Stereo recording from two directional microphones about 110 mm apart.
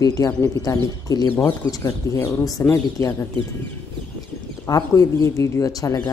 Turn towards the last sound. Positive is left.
turn(degrees=35)  # may be behind; listen again after turning